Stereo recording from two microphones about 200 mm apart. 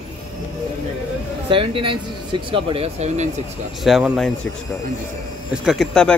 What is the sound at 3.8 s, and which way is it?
Speech, centre (ahead or behind).